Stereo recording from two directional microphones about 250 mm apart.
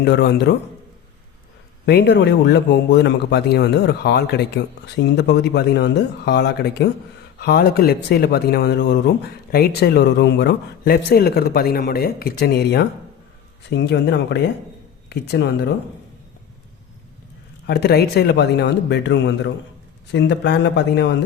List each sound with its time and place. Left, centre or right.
0.0 s speech: left
1.9 s speech: left
17.7 s speech: left